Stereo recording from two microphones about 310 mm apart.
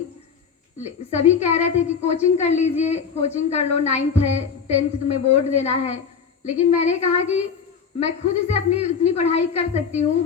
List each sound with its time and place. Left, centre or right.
0.8 s a woman's voice: left